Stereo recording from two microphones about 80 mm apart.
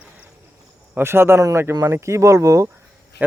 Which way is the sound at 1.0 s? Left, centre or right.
Right.